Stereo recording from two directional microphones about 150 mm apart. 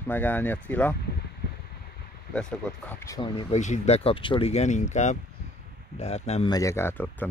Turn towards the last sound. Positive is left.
turn(degrees=15)  # may be behind; listen again after turning